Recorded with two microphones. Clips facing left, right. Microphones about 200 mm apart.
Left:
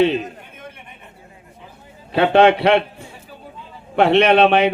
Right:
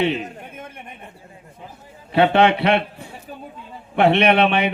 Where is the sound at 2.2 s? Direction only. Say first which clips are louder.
Left 3 dB; 55° left (ahead or behind).